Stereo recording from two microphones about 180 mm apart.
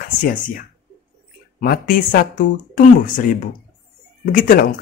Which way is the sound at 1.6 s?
55° left (ahead or behind).